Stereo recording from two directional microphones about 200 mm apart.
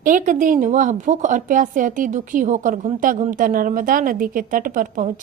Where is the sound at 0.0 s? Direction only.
40° right (ahead or behind).